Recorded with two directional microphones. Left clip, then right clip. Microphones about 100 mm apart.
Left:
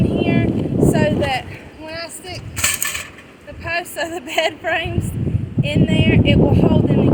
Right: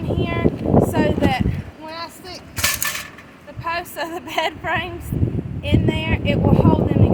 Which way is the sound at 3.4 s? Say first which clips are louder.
Left 2 dB; 50° right (ahead or behind).